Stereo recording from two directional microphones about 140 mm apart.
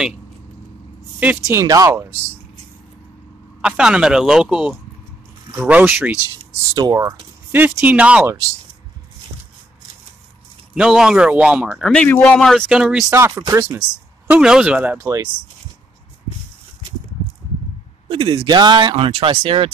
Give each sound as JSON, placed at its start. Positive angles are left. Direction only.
{"t": 1.2, "sound": "speech", "side_deg": -10}
{"t": 1.6, "sound": "speech", "side_deg": -25}
{"t": 3.6, "sound": "speech", "side_deg": -5}
{"t": 6.7, "sound": "speech", "side_deg": -30}
{"t": 7.8, "sound": "speech", "side_deg": -10}
{"t": 10.7, "sound": "speech", "side_deg": -5}
{"t": 11.9, "sound": "speech", "side_deg": 10}
{"t": 13.1, "sound": "speech", "side_deg": -20}
{"t": 18.0, "sound": "speech", "side_deg": -40}